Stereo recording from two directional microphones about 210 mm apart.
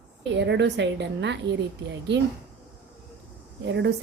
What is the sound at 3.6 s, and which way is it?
Speech, 55° right (ahead or behind).